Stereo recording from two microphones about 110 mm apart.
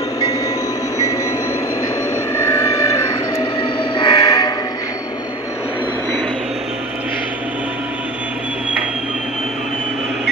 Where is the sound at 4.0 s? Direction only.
35° left (ahead or behind).